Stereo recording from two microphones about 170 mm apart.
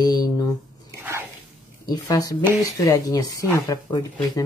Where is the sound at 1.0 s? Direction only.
15° right (ahead or behind).